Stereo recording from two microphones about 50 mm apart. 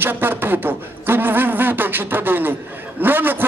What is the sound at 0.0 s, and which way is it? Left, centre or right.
A man's voice, right.